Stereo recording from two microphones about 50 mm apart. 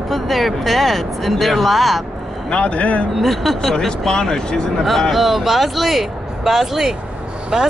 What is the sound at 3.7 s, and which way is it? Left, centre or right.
Speech, centre.